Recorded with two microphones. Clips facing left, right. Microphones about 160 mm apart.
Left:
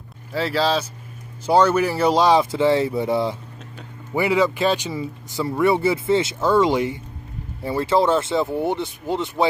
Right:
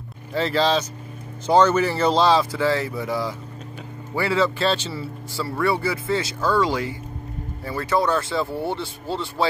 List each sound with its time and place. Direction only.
0.3 s speech: 5° left (ahead or behind)